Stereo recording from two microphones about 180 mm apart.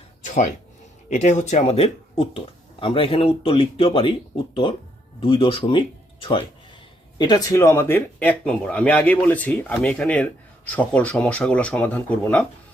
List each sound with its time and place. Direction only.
0.3 s speech: 40° left (ahead or behind)
5.2 s speech: 30° left (ahead or behind); by 12.5 s 10° left (ahead or behind)